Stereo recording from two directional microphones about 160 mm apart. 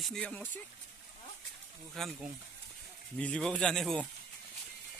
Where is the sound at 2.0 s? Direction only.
Centre (ahead or behind).